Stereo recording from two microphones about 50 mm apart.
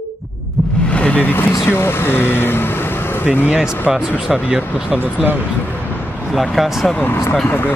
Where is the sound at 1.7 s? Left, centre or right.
Left.